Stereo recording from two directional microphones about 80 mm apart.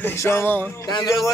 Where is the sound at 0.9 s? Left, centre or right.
Left.